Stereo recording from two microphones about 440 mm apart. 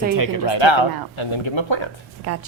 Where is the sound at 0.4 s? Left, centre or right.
Left.